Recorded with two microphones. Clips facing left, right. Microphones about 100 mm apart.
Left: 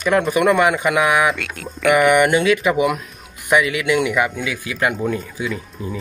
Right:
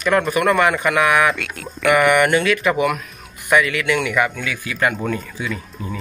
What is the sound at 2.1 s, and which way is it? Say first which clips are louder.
Speech: left 1 dB; 15° left (ahead or behind).